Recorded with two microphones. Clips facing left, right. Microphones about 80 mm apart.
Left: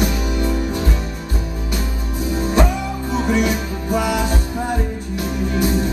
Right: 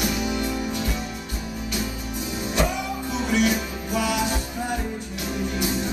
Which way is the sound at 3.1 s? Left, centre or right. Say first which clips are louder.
Left 4 dB; left.